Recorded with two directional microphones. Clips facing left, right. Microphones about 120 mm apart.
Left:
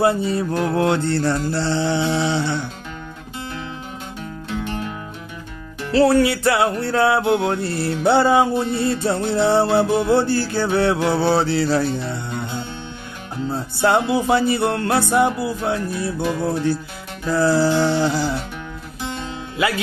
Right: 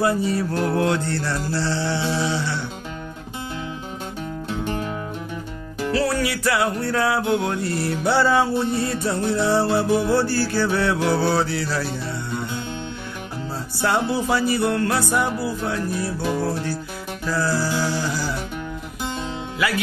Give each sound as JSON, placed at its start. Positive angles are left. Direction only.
{"t": 0.0, "sound": "music", "side_deg": 25}
{"t": 5.9, "sound": "music", "side_deg": 30}
{"t": 13.5, "sound": "music", "side_deg": 25}
{"t": 17.3, "sound": "music", "side_deg": 25}
{"t": 19.6, "sound": "music", "side_deg": 25}